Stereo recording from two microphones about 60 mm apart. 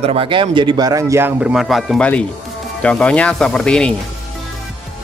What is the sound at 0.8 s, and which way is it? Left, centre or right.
Speech, right.